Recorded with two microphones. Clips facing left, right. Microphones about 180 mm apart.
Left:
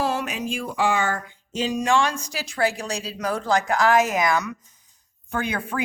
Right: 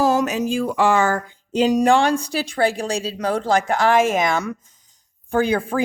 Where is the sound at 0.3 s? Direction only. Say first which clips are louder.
Right 7 dB; 40° right (ahead or behind).